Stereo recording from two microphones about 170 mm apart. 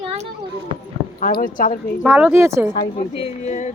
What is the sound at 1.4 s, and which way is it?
Speech, 55° left (ahead or behind).